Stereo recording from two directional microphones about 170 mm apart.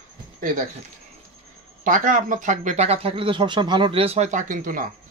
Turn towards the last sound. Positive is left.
turn(degrees=-50)  # may be behind; listen again after turning